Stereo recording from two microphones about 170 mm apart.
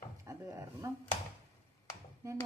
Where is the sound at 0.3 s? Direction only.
15° right (ahead or behind).